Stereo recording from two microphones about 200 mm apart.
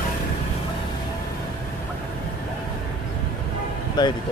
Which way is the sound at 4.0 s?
20° left (ahead or behind).